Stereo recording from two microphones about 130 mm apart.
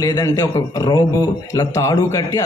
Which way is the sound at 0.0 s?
25° left (ahead or behind).